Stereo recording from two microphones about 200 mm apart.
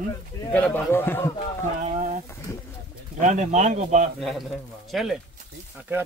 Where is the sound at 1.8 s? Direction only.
40° right (ahead or behind).